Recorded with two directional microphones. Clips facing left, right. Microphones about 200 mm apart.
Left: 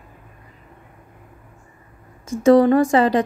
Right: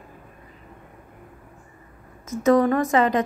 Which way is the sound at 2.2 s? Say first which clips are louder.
Left 5 dB; 30° left (ahead or behind).